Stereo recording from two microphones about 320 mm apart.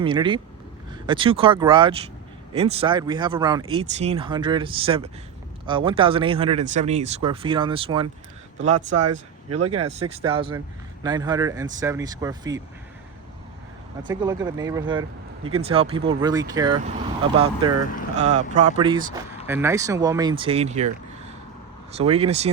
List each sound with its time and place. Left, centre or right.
0.0 s speech: centre
8.7 s speech: right
9.6 s speech: centre
14.1 s speech: centre
21.9 s speech: centre